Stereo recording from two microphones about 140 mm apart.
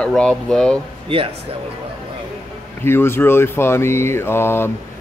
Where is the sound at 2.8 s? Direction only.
15° left (ahead or behind).